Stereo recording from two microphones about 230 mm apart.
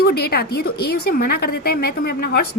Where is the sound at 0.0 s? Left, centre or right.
Left.